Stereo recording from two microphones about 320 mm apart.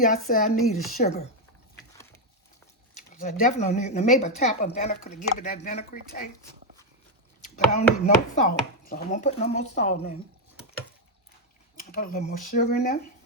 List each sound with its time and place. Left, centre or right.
0.0 s speech: left
3.1 s speech: left
7.5 s speech: left
11.8 s speech: left